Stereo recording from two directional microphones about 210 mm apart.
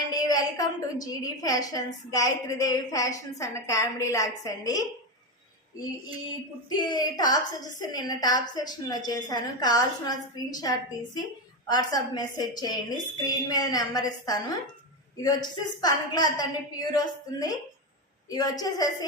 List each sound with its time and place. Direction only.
0.2 s a woman's voice: 20° left (ahead or behind)
6.7 s a woman's voice: 20° left (ahead or behind)
18.3 s a woman's voice: 15° left (ahead or behind)